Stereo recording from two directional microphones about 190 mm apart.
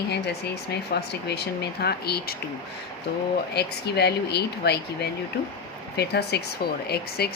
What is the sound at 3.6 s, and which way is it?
Speech, 60° left (ahead or behind).